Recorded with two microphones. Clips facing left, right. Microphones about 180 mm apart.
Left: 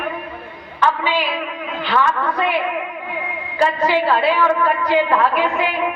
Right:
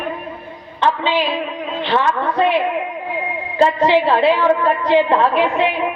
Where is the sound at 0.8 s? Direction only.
25° right (ahead or behind).